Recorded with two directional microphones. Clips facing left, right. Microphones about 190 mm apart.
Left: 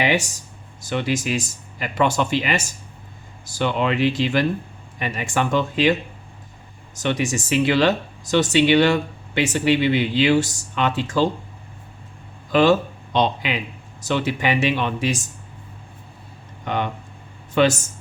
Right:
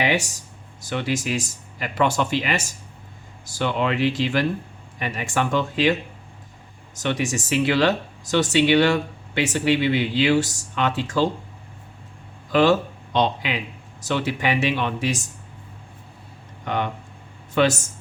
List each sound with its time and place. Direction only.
0.0 s speech: 20° left (ahead or behind)
7.0 s speech: 15° left (ahead or behind)
12.5 s speech: 20° left (ahead or behind)
16.6 s speech: 20° left (ahead or behind)